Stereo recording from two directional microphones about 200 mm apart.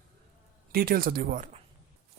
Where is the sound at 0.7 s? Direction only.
45° right (ahead or behind).